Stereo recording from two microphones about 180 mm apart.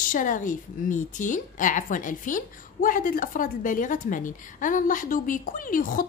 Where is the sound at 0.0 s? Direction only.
50° left (ahead or behind).